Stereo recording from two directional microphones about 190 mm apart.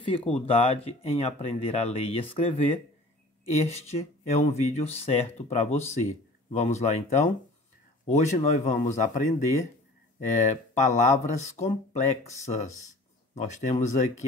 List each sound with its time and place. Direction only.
0.0 s speech: 30° left (ahead or behind)
10.4 s speech: 40° left (ahead or behind)
13.3 s speech: 40° left (ahead or behind)